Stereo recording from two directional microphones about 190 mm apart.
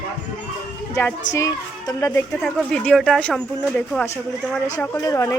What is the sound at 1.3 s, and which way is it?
A woman's voice, 15° left (ahead or behind).